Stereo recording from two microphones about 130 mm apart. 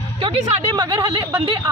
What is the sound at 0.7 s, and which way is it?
Speech, 30° right (ahead or behind).